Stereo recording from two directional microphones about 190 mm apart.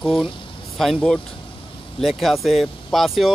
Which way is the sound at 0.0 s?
Centre (ahead or behind).